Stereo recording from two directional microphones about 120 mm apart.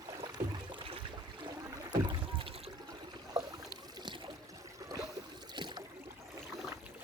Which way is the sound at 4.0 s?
40° right (ahead or behind).